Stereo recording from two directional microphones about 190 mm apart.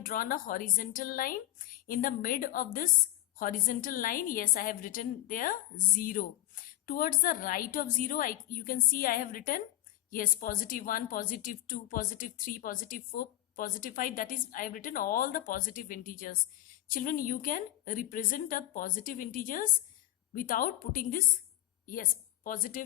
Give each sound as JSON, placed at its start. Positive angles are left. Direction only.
{"t": 0.0, "sound": "a woman's voice", "side_deg": 50}